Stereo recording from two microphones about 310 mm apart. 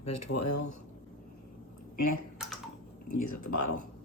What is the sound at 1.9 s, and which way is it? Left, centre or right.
Speech, left.